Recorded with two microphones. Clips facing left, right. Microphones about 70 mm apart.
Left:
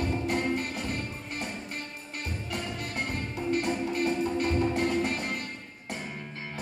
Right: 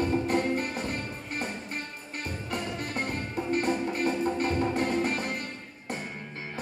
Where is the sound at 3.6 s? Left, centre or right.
Right.